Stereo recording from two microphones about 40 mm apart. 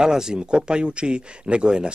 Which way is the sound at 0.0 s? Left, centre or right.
Centre.